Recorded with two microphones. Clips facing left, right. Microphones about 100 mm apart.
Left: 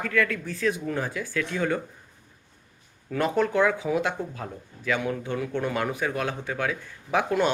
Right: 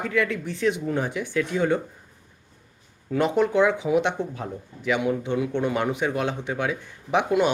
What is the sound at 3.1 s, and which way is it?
Speech, 20° right (ahead or behind).